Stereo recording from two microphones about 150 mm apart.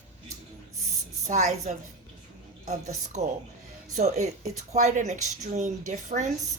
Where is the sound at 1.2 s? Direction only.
50° right (ahead or behind).